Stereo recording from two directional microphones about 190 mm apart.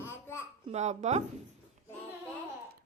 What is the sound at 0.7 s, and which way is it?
Speech, 35° right (ahead or behind).